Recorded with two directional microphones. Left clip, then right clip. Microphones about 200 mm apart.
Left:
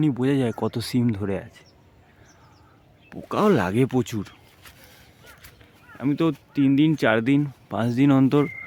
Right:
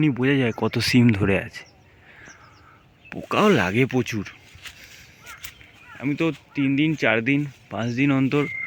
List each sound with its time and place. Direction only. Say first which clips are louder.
0.0 s speech: right 2 dB; centre (ahead or behind)
0.8 s speech: right 6 dB; 10° right (ahead or behind)
3.1 s speech: right 5 dB; 10° right (ahead or behind)
3.3 s speech: right 2 dB; 5° left (ahead or behind)
6.0 s speech: left 1 dB; 25° left (ahead or behind)